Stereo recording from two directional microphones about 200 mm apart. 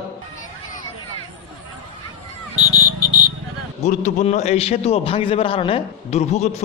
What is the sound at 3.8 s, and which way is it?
A man's voice, 35° left (ahead or behind).